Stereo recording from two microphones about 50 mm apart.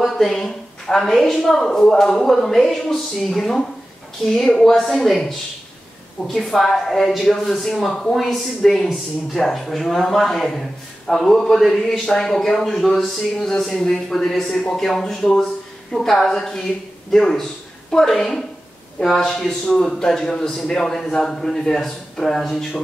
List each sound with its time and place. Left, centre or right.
0.0 s a woman's voice: centre